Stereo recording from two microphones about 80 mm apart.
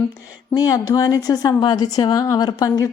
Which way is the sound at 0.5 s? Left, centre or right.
Left.